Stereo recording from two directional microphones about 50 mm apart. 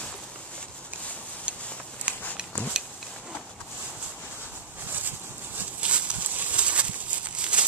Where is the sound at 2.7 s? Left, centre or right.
Centre.